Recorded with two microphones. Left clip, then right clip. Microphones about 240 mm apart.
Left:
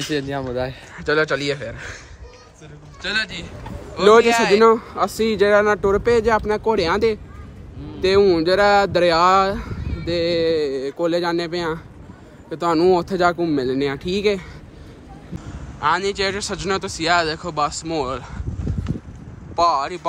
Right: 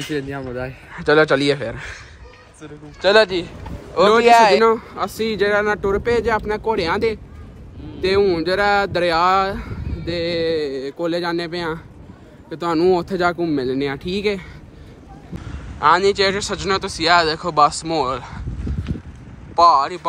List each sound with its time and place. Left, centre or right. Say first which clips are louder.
0.1 s a man's voice: left 2 dB; left
0.9 s a man's voice: right 5 dB; centre
3.0 s a man's voice: right 10 dB; centre
15.8 s speech: right 5 dB; centre
19.5 s speech: right 5 dB; centre